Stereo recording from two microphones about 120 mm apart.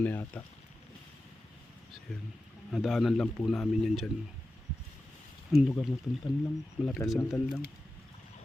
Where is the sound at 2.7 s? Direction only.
Centre (ahead or behind).